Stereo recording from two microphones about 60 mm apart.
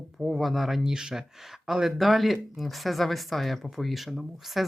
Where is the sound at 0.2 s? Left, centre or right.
Centre.